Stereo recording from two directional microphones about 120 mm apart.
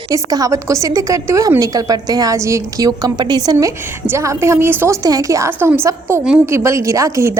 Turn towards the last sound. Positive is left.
turn(degrees=-25)  # may be behind; listen again after turning